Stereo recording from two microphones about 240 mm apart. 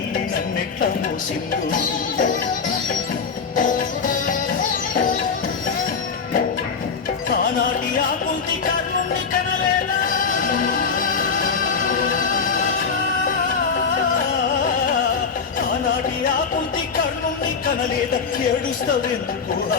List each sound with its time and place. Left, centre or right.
3.5 s music: left
11.4 s music: left